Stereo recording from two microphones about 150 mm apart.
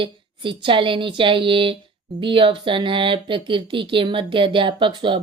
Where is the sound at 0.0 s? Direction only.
35° right (ahead or behind).